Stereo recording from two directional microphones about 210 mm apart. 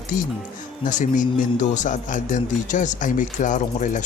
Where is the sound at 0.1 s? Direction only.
40° left (ahead or behind).